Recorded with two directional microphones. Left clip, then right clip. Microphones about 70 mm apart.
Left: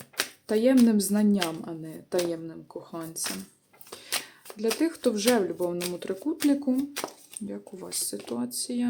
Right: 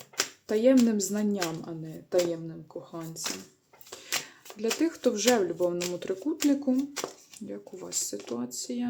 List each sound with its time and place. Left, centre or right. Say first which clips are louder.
0.2 s speech: left 1 dB; centre
3.9 s shuffling cards: even; centre
4.7 s speech: left 1 dB; centre
8.1 s speech: left 1 dB; left
8.4 s speech: left 3 dB; centre